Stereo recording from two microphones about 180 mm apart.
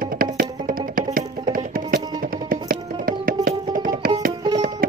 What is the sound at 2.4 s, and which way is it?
Music, 55° right (ahead or behind).